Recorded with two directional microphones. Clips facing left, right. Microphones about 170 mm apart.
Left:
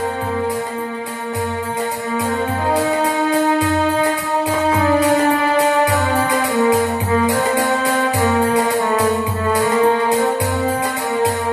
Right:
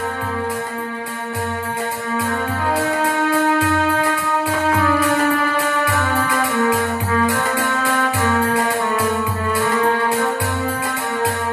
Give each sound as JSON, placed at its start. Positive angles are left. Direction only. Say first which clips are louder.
{"t": 2.7, "sound": "music", "louder": "left 2 dB", "side_deg": 20}